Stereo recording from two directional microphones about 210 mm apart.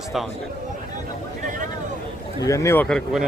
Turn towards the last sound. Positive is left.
turn(degrees=5)  # may be behind; listen again after turning